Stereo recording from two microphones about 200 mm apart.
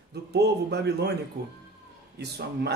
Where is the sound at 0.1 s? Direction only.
55° right (ahead or behind).